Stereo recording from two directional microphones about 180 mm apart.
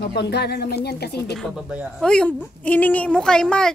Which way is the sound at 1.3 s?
5° right (ahead or behind).